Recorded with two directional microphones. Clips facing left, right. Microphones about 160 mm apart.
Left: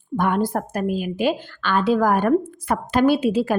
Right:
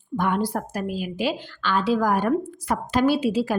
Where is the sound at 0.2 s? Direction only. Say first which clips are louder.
Left 3 dB; 50° left (ahead or behind).